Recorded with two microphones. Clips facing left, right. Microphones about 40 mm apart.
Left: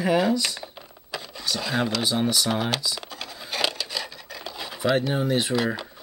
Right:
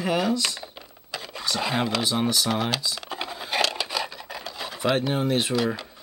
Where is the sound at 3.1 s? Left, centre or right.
Right.